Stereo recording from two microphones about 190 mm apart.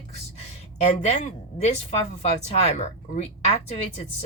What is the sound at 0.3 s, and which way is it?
A woman's voice, 35° left (ahead or behind).